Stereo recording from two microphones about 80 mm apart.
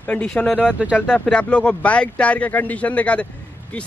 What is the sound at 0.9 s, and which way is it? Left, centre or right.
A man's voice, centre.